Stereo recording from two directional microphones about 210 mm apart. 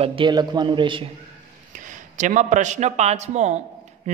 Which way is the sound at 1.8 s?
40° right (ahead or behind).